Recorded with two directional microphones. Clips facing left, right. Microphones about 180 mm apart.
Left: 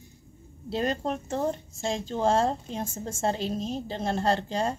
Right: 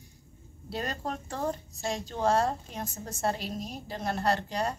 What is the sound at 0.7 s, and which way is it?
Speech, 25° left (ahead or behind).